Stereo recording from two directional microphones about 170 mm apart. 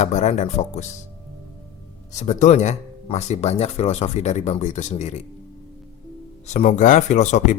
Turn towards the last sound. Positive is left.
turn(degrees=45)  # may be behind; listen again after turning